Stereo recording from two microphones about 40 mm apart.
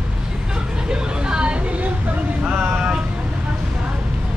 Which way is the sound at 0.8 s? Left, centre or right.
Right.